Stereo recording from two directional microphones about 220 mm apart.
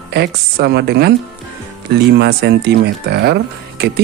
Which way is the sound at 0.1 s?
50° right (ahead or behind).